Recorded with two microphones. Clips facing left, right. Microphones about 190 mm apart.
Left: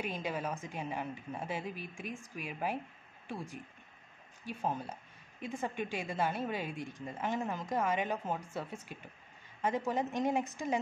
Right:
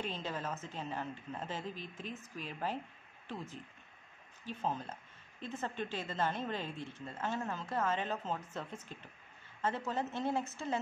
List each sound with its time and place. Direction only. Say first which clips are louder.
0.0 s a woman's voice: left 3 dB; 10° left (ahead or behind)